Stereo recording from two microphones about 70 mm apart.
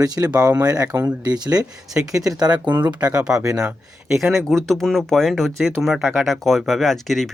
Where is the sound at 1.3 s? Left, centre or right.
Right.